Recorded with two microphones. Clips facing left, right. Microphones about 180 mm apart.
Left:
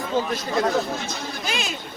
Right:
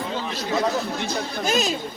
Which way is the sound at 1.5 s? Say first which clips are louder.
Right 7 dB; 40° right (ahead or behind).